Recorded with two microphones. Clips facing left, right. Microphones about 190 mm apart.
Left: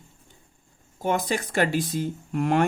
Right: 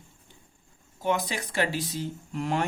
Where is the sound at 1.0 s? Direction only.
50° left (ahead or behind).